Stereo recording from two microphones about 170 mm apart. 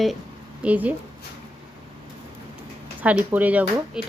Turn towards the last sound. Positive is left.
turn(degrees=-10)  # may be behind; listen again after turning